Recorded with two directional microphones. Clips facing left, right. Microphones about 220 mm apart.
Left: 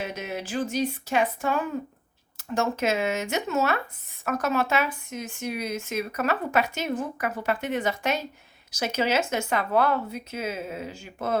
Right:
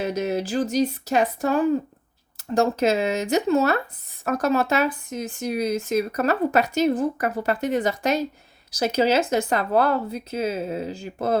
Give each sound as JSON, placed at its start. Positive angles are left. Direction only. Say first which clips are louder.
{"t": 0.0, "sound": "speech", "louder": "right 8 dB", "side_deg": -40}